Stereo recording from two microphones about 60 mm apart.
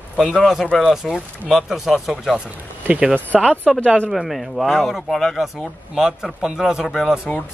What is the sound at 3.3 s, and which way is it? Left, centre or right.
Speech, centre.